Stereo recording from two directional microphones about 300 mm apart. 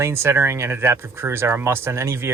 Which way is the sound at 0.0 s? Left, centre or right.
Centre.